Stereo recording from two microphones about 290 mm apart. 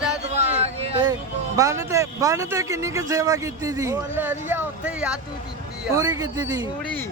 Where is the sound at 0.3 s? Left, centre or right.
Right.